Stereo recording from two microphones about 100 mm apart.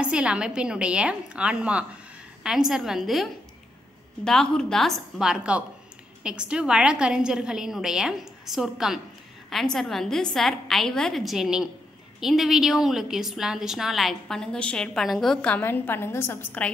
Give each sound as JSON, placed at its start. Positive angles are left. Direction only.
{"t": 0.0, "sound": "a woman's voice", "side_deg": -10}
{"t": 15.4, "sound": "a woman's voice", "side_deg": 15}